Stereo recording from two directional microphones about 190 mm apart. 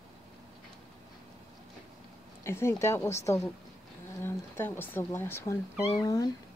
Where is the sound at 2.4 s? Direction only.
15° left (ahead or behind).